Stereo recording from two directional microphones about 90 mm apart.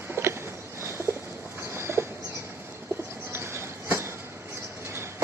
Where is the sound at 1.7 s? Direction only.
30° right (ahead or behind).